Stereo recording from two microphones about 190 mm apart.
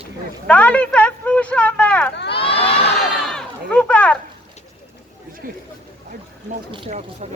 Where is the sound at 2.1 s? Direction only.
65° left (ahead or behind).